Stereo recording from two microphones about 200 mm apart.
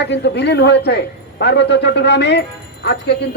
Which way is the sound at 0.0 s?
60° left (ahead or behind).